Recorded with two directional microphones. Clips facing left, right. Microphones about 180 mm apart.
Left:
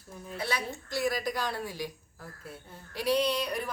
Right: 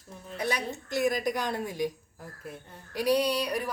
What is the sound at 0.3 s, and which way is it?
A woman's voice, 20° right (ahead or behind).